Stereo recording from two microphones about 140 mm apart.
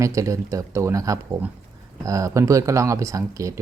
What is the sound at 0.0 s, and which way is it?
Speech, 20° right (ahead or behind).